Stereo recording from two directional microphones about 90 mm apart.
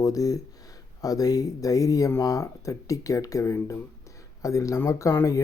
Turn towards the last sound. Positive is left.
turn(degrees=35)  # may be behind; listen again after turning